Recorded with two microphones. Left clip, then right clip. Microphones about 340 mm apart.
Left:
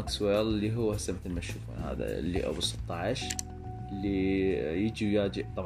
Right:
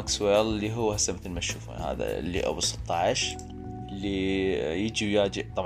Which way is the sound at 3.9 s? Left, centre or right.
Right.